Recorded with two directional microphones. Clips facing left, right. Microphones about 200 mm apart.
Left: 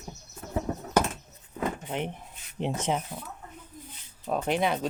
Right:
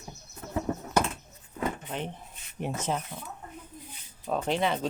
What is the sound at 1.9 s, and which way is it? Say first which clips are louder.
Speech: left 3 dB; 15° left (ahead or behind).